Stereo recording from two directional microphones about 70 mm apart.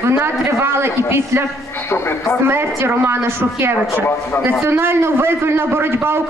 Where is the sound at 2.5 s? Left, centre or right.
Right.